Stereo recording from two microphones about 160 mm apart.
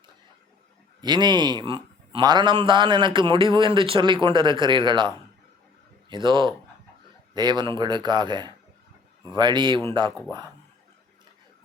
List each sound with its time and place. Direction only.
1.0 s a man's voice: 25° right (ahead or behind)